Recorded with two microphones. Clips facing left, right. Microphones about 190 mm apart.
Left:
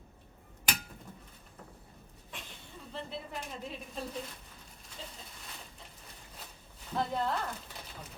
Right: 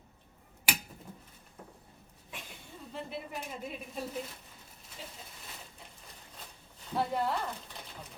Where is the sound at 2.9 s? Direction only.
10° right (ahead or behind).